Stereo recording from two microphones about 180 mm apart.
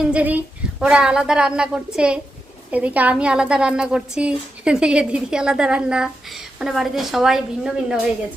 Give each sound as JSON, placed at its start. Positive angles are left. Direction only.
{"t": 0.0, "sound": "a woman's voice", "side_deg": -5}